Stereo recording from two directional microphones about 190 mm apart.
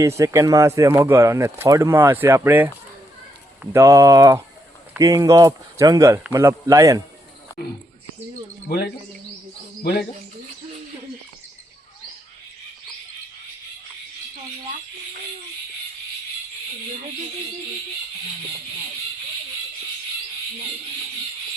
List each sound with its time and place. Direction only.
0.2 s speech: 15° right (ahead or behind)
9.8 s speech: 55° left (ahead or behind)